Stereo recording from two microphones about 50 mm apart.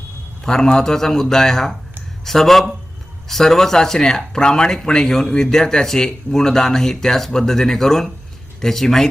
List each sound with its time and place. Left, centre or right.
0.4 s speech: centre